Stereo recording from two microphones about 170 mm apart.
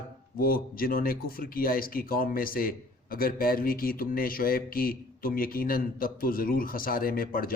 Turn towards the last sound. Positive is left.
turn(degrees=55)  # may be behind; listen again after turning